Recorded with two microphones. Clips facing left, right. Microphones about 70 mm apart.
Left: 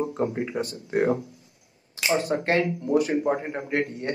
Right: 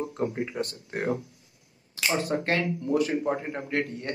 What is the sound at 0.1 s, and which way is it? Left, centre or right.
Speech, left.